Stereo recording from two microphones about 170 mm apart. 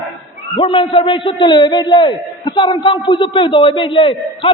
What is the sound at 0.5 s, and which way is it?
A man's voice, 30° left (ahead or behind).